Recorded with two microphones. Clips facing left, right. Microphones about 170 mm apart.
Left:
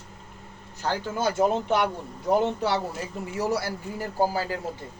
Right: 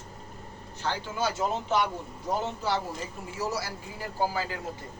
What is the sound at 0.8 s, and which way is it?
Speech, 50° left (ahead or behind).